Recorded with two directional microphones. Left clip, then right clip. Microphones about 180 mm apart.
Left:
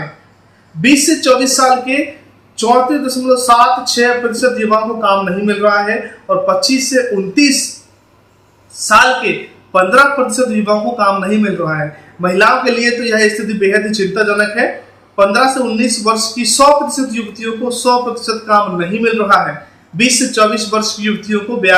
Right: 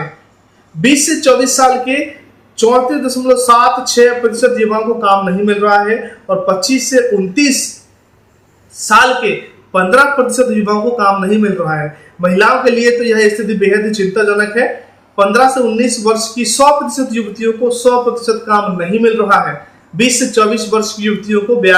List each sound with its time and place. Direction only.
0.8 s a man's voice: 15° right (ahead or behind)
8.7 s a man's voice: 15° right (ahead or behind)